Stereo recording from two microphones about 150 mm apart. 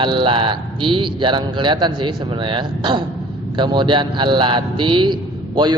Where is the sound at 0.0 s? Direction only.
35° right (ahead or behind).